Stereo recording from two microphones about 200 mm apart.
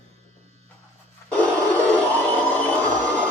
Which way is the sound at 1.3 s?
5° left (ahead or behind).